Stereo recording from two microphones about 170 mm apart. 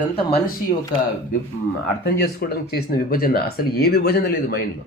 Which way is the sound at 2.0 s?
70° left (ahead or behind).